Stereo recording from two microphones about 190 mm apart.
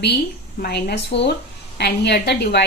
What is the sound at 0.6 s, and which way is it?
A woman's voice, 60° left (ahead or behind).